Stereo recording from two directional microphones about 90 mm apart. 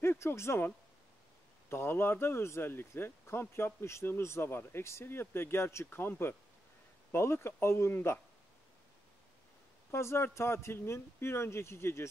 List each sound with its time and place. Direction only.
0.0 s speech: 25° left (ahead or behind)
9.8 s speech: 30° left (ahead or behind)